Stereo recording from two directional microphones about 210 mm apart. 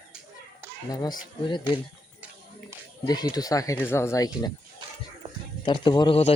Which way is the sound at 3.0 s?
20° left (ahead or behind).